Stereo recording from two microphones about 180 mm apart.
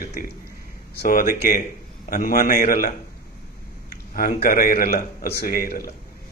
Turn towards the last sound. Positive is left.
turn(degrees=55)  # may be behind; listen again after turning